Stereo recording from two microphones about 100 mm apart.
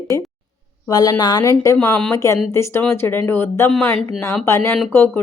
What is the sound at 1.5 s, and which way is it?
Speech, 30° left (ahead or behind).